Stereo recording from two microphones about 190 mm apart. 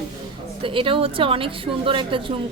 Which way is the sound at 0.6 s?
25° right (ahead or behind).